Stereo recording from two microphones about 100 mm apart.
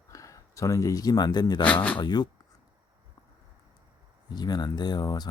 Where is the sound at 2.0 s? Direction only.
45° left (ahead or behind).